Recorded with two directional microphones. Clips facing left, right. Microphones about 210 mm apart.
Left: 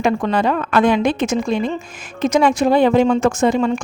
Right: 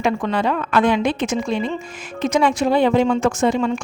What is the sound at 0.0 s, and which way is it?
A woman's voice, 40° left (ahead or behind).